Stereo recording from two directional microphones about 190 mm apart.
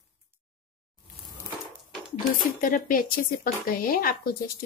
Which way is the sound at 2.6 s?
45° left (ahead or behind).